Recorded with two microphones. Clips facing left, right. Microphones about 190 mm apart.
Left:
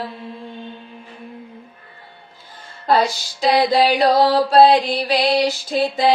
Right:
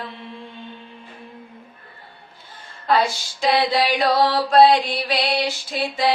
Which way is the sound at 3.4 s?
35° left (ahead or behind).